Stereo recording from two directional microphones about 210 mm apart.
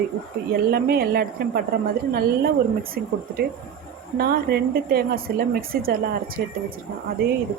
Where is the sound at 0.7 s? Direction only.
45° right (ahead or behind).